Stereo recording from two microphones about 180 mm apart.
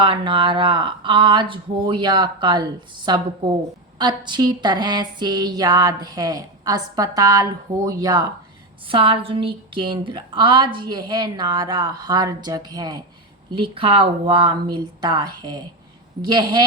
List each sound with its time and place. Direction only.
0.0 s a woman's voice: 25° right (ahead or behind)